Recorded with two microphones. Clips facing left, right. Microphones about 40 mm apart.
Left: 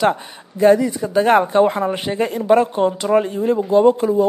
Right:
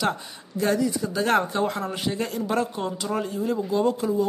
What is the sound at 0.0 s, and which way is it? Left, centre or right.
Speech, left.